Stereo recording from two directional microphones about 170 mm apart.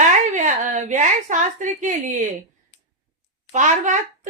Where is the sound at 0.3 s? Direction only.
50° right (ahead or behind).